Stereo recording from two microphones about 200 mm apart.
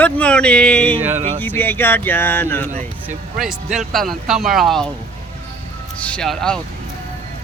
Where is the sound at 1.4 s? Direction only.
10° left (ahead or behind).